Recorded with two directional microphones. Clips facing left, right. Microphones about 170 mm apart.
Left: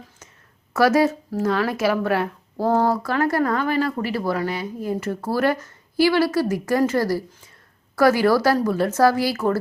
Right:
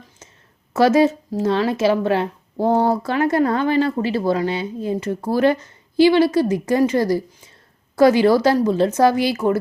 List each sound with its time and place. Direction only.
0.7 s speech: 20° right (ahead or behind)